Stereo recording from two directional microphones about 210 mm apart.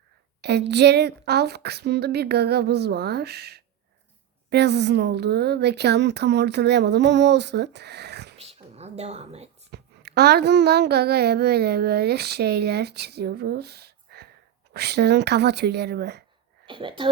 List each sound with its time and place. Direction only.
0.4 s a child's voice: 55° right (ahead or behind)
8.4 s a sound: 30° right (ahead or behind)
9.7 s a child's voice: 50° right (ahead or behind)
16.6 s speech: 25° right (ahead or behind)